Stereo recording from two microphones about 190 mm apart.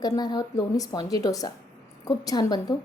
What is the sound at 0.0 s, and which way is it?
A woman's voice, 20° left (ahead or behind).